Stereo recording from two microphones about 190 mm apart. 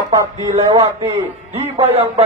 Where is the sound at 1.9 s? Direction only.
30° right (ahead or behind).